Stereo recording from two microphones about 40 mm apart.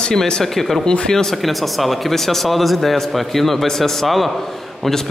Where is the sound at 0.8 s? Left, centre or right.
Centre.